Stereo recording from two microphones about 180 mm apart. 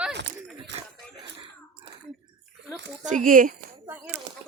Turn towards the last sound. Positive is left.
turn(degrees=-45)  # may be behind; listen again after turning